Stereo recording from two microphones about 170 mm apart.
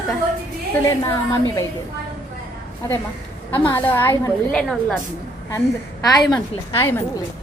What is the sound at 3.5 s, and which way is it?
A woman's voice, 15° left (ahead or behind).